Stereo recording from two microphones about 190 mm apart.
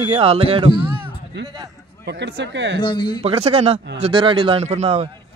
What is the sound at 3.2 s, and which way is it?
Speech, 30° right (ahead or behind).